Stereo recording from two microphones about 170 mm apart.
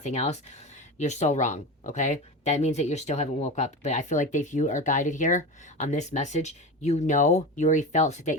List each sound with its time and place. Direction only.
0.0 s speech: 40° left (ahead or behind)